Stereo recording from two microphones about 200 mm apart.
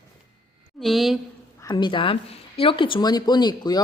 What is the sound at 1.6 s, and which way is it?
Speech, 20° left (ahead or behind).